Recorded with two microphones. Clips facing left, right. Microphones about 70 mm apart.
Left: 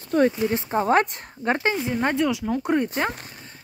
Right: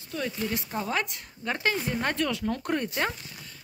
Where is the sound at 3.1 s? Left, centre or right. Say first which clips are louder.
Left 4 dB; left.